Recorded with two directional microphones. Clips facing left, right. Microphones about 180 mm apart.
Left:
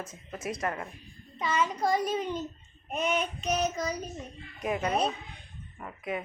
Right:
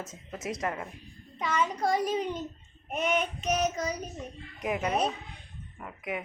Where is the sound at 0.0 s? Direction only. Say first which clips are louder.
Even; 20° right (ahead or behind).